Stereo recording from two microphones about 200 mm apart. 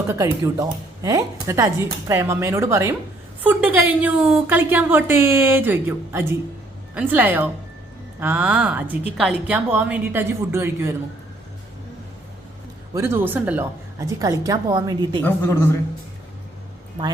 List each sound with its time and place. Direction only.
0.1 s a woman's voice: 15° right (ahead or behind)
12.9 s a woman's voice: 10° right (ahead or behind)